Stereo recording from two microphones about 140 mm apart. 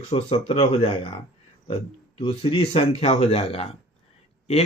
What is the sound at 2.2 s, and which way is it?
Speech, 40° left (ahead or behind).